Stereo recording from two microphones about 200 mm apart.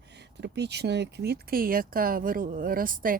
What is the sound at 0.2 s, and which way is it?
Speech, 60° right (ahead or behind).